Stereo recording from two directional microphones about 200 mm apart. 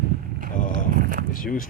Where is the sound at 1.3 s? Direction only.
45° left (ahead or behind).